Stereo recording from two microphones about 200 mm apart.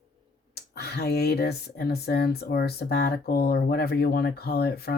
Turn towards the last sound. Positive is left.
turn(degrees=50)  # may be behind; listen again after turning